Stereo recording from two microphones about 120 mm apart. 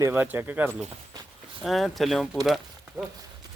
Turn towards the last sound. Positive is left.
turn(degrees=0)  # may be behind; listen again after turning